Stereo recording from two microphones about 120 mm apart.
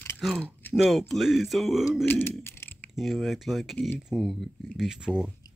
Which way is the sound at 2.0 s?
20° left (ahead or behind).